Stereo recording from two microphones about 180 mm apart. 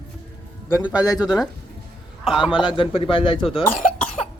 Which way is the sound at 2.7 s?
30° left (ahead or behind).